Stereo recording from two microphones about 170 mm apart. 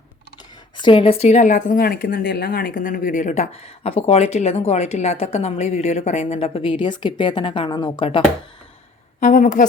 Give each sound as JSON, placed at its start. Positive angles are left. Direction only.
{"t": 0.8, "sound": "a woman's voice", "side_deg": 30}
{"t": 9.2, "sound": "a woman's voice", "side_deg": 50}